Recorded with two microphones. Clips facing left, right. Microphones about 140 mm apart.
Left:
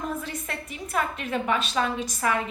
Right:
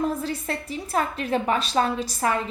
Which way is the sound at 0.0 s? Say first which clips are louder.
Right 6 dB; 35° right (ahead or behind).